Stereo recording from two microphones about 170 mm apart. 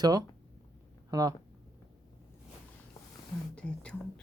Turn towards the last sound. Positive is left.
turn(degrees=5)  # may be behind; listen again after turning